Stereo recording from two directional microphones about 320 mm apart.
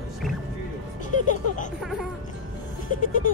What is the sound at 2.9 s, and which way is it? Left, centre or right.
Goat, left.